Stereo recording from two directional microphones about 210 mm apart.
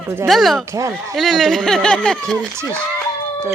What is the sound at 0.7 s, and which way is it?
Speech, 15° right (ahead or behind).